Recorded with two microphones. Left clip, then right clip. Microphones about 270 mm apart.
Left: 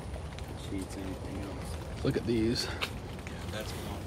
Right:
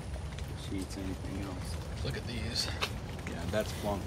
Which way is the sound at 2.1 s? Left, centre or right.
Left.